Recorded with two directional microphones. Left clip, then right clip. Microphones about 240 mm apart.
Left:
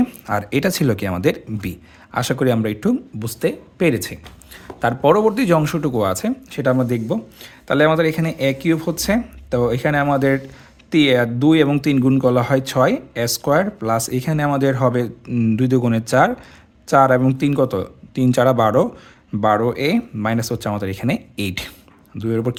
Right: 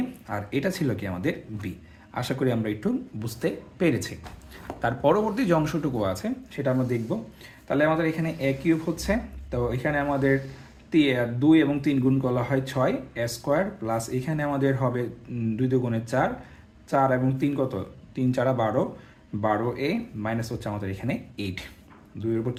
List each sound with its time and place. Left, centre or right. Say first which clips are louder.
0.3 s a man's voice: left 8 dB; left